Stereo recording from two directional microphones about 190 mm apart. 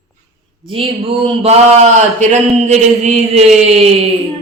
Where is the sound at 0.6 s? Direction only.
30° right (ahead or behind).